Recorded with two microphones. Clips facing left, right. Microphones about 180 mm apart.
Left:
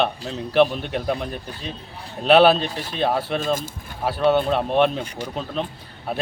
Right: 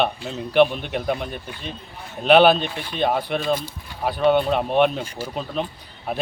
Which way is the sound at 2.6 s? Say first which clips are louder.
Left 1 dB; 35° left (ahead or behind).